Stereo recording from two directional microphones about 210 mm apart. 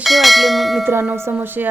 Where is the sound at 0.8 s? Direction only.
10° right (ahead or behind).